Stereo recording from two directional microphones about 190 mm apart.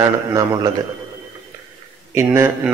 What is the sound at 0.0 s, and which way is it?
Speech, 15° right (ahead or behind).